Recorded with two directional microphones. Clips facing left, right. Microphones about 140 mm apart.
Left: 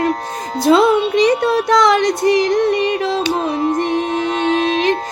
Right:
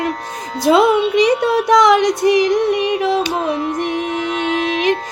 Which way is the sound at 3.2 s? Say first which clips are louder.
Left 2 dB; 35° left (ahead or behind).